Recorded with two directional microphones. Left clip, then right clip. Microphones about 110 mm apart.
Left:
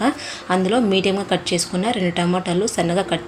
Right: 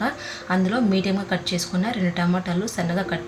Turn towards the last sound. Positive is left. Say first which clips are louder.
# left 6 dB
turn(degrees=35)  # may be behind; listen again after turning